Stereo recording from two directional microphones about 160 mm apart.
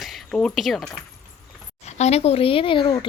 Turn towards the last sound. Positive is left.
turn(degrees=30)  # may be behind; listen again after turning